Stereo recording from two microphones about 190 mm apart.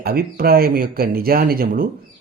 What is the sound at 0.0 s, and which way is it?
Speech, 55° right (ahead or behind).